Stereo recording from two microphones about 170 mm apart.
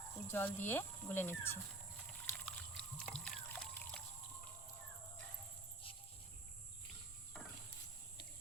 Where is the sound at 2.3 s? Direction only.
5° left (ahead or behind).